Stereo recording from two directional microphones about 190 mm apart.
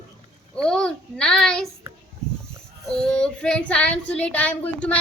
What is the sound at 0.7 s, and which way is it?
A child's voice, 5° left (ahead or behind).